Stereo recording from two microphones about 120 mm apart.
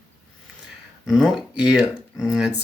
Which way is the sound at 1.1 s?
5° left (ahead or behind).